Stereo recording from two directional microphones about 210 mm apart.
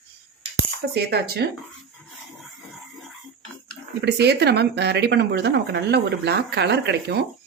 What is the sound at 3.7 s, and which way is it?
Speech, 50° right (ahead or behind).